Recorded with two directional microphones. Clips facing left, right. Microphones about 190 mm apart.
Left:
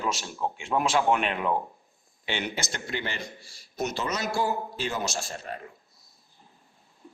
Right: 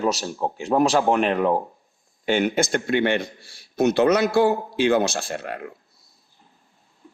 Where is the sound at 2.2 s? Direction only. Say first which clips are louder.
Right 11 dB; 50° right (ahead or behind); by 5.7 s 70° right (ahead or behind).